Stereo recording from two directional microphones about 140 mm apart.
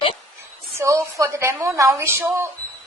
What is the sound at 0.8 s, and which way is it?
A woman's voice, 20° right (ahead or behind).